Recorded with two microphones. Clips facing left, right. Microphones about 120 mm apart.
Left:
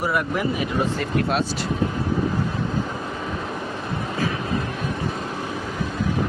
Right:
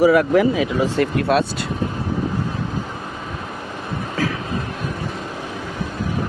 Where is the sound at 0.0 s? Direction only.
90° right.